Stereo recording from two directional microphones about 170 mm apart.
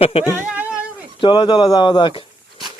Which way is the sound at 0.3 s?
10° right (ahead or behind).